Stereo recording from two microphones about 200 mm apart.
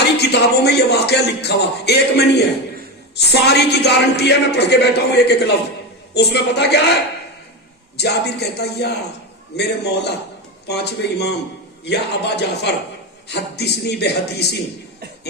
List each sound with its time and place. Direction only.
0.2 s speech: 55° left (ahead or behind)
7.9 s speech: 55° left (ahead or behind)